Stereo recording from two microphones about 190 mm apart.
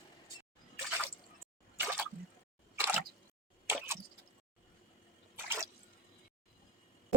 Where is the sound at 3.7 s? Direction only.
10° right (ahead or behind).